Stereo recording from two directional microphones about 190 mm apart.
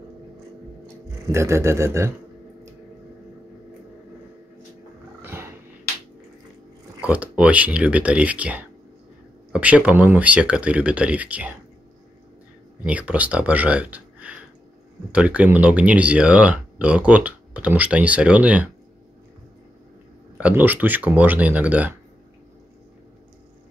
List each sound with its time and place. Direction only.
0.8 s music: 15° right (ahead or behind)
5.2 s purr: 10° right (ahead or behind)
7.0 s speech: 5° right (ahead or behind)
12.8 s speech: 5° right (ahead or behind)
20.3 s speech: 10° right (ahead or behind)